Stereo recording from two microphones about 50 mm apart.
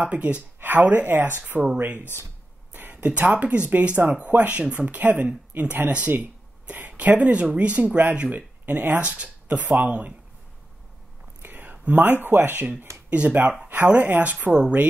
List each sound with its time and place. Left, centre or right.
0.0 s speech: right
0.6 s speech: right
2.7 s a sound: right
3.1 s speech: right
11.4 s a sound: right
11.9 s speech: right
13.1 s speech: right